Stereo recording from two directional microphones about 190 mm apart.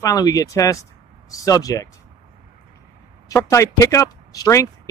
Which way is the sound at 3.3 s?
15° left (ahead or behind).